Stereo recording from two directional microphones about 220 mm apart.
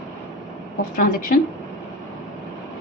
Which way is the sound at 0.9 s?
35° left (ahead or behind).